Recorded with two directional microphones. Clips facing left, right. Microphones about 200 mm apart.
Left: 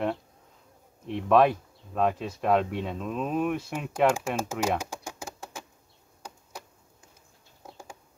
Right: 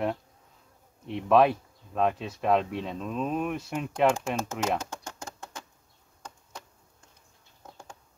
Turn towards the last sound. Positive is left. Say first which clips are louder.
# left 2 dB
turn(degrees=10)  # may be behind; listen again after turning